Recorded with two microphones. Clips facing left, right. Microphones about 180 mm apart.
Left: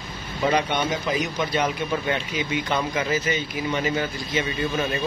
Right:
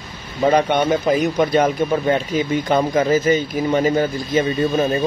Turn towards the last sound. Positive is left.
turn(degrees=-30)  # may be behind; listen again after turning